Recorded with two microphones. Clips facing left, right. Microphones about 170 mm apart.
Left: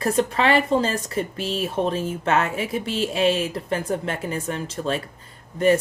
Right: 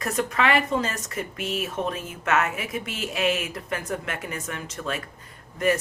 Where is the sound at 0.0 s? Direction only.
30° left (ahead or behind).